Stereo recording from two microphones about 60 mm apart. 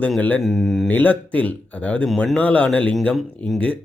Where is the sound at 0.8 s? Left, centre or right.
Left.